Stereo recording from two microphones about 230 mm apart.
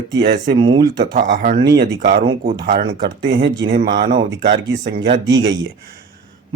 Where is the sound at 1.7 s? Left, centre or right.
Right.